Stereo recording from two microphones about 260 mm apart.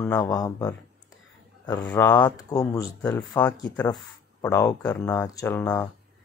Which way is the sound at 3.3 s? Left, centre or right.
Centre.